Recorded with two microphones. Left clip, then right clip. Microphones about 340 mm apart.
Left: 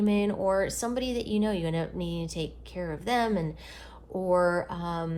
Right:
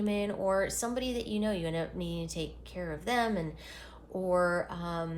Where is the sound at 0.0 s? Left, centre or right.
Left.